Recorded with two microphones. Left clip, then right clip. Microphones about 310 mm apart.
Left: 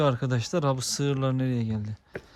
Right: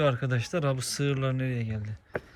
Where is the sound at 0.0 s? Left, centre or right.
Centre.